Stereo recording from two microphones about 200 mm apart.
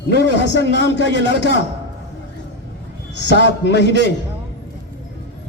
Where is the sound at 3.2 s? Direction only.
60° left (ahead or behind).